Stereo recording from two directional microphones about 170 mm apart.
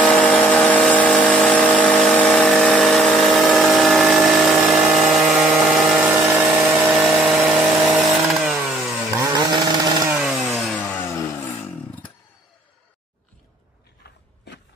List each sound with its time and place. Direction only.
0.0 s vehicle: 5° left (ahead or behind)
8.6 s chainsaw: centre (ahead or behind)
9.3 s chainsaw: 25° right (ahead or behind)
10.0 s a sound: 5° right (ahead or behind)